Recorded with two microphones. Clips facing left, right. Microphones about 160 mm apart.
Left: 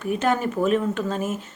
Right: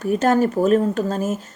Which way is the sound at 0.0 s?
40° right (ahead or behind).